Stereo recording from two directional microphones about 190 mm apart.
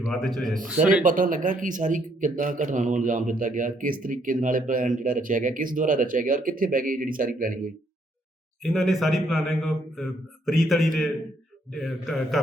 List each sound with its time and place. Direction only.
0.0 s a man's voice: centre (ahead or behind)
1.0 s a man's voice: 45° right (ahead or behind)
8.6 s a man's voice: centre (ahead or behind)